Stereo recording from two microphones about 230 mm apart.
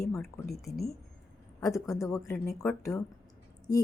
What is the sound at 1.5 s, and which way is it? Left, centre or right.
Speech, centre.